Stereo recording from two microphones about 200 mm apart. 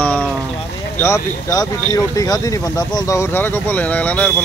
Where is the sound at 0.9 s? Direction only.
10° left (ahead or behind).